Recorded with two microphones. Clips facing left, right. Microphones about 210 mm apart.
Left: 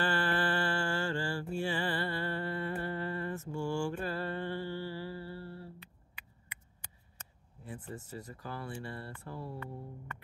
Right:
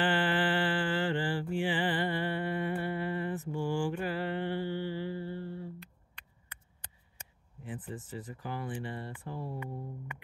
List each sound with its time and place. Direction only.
0.0 s mantra: 15° right (ahead or behind)
5.8 s a sound: 10° left (ahead or behind)
7.2 s speech: 15° right (ahead or behind)
9.6 s music: 15° right (ahead or behind)